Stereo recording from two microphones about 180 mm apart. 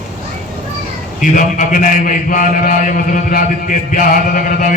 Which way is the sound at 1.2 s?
45° left (ahead or behind).